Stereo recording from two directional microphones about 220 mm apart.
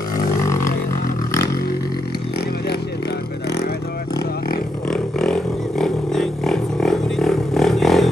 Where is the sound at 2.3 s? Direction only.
45° left (ahead or behind).